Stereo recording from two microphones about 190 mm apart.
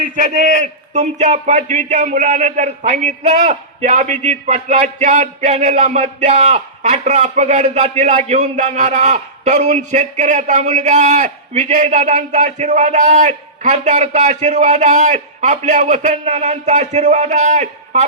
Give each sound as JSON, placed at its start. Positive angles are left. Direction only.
{"t": 0.0, "sound": "a man's voice", "side_deg": -40}